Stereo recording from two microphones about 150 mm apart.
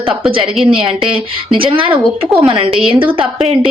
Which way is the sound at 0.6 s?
35° right (ahead or behind).